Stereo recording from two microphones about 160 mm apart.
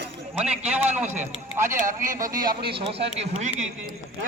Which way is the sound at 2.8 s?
40° right (ahead or behind).